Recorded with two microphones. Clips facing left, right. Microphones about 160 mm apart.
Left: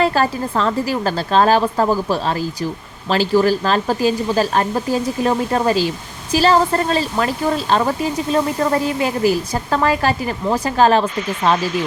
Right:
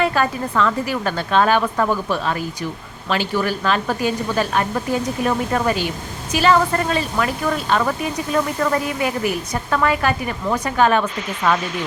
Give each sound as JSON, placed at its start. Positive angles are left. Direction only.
{"t": 0.0, "sound": "speech", "side_deg": 35}